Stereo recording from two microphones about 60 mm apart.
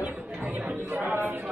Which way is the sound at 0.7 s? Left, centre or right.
Right.